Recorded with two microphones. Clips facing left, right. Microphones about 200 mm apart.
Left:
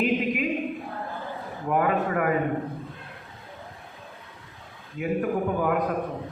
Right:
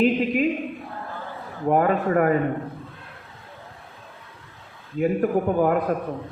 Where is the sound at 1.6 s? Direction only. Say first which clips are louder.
Right 4 dB; 40° right (ahead or behind).